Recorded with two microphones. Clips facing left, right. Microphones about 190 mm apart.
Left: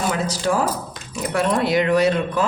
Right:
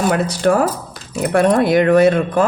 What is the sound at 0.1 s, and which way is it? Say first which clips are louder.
Speech: right 6 dB; 60° right (ahead or behind).